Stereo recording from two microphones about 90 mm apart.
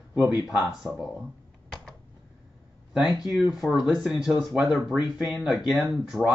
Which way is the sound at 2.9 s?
5° right (ahead or behind).